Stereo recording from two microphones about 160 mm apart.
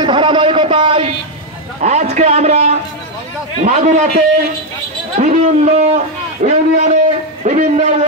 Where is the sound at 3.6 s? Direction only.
50° right (ahead or behind).